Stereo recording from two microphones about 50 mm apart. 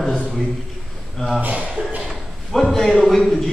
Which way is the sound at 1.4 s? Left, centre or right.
Right.